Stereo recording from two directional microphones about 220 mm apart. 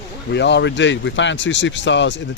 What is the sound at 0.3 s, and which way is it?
A man's voice, 50° left (ahead or behind).